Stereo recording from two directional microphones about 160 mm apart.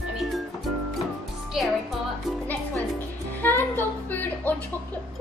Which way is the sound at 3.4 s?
15° left (ahead or behind).